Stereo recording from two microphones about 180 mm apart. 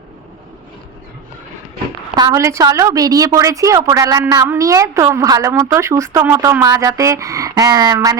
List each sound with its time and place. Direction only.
2.1 s a woman's voice: 20° right (ahead or behind)